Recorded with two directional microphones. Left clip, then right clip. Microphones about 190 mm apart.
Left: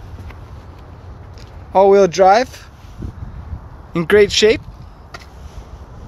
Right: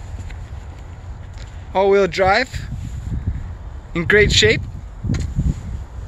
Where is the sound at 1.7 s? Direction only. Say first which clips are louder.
Left 5 dB; 30° left (ahead or behind).